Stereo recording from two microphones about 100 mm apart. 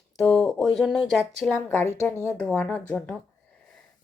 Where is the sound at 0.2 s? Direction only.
5° left (ahead or behind).